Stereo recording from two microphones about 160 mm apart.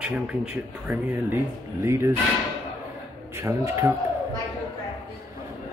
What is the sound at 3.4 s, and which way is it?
Speech, 15° right (ahead or behind).